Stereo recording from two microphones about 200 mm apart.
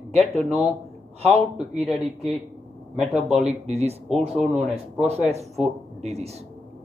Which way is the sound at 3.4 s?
30° right (ahead or behind).